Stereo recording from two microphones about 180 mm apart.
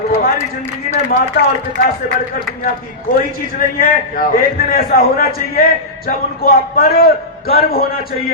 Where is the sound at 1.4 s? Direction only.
55° left (ahead or behind).